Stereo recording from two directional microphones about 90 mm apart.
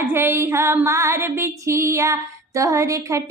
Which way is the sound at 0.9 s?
30° right (ahead or behind).